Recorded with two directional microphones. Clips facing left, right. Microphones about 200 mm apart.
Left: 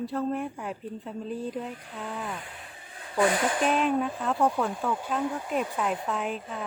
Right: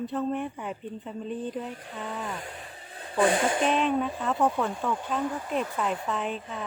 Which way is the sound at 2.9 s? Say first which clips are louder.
Right 1 dB; 30° right (ahead or behind).